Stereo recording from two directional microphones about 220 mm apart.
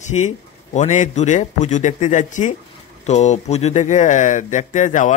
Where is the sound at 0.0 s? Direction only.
30° left (ahead or behind).